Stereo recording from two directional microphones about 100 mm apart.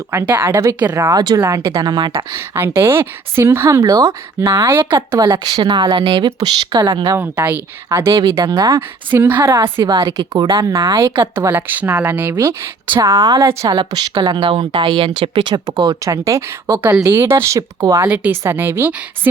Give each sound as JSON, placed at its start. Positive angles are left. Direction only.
{"t": 0.1, "sound": "a woman's voice", "side_deg": -25}
{"t": 2.1, "sound": "a woman's voice", "side_deg": -25}
{"t": 5.6, "sound": "speech", "side_deg": -50}
{"t": 7.2, "sound": "a woman's voice", "side_deg": -20}
{"t": 7.9, "sound": "speech", "side_deg": -30}
{"t": 9.1, "sound": "a woman's voice", "side_deg": -20}
{"t": 9.8, "sound": "speech", "side_deg": -40}
{"t": 10.9, "sound": "speech", "side_deg": -55}
{"t": 11.5, "sound": "a woman's voice", "side_deg": -20}
{"t": 13.4, "sound": "a woman's voice", "side_deg": -30}
{"t": 13.7, "sound": "speech", "side_deg": -45}
{"t": 15.5, "sound": "a woman's voice", "side_deg": -45}
{"t": 18.1, "sound": "a woman's voice", "side_deg": -20}